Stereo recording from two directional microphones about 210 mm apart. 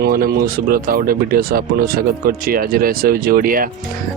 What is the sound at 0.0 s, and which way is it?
Speech, 45° right (ahead or behind).